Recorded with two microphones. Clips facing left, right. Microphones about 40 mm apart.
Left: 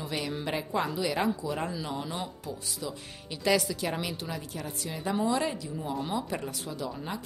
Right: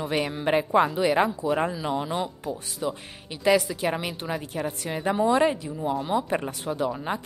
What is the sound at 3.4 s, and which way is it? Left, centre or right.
A woman's voice, right.